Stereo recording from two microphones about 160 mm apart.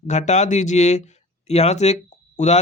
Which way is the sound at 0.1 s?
45° left (ahead or behind).